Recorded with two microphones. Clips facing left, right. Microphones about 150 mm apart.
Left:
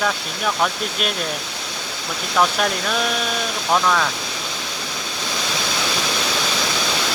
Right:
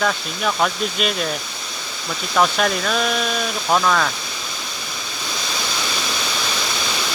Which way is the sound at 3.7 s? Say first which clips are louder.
Right 1 dB; centre (ahead or behind).